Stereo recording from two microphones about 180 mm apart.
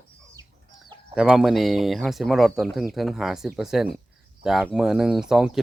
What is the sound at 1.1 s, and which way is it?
Speech, 5° right (ahead or behind).